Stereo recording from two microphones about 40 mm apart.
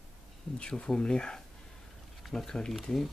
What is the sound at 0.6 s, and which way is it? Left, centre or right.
Speech, left.